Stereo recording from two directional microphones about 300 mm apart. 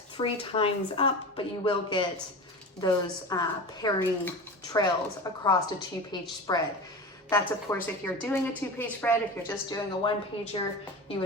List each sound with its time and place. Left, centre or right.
0.2 s a woman's voice: centre